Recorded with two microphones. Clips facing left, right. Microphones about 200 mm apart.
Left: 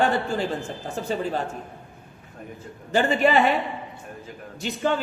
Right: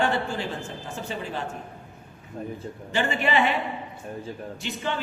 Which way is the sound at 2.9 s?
40° left (ahead or behind).